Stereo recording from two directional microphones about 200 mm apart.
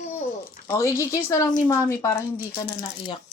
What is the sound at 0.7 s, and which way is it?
A woman's voice, 15° left (ahead or behind).